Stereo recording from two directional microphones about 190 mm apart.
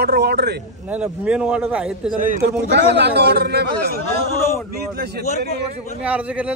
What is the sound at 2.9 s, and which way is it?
Speech, 60° right (ahead or behind).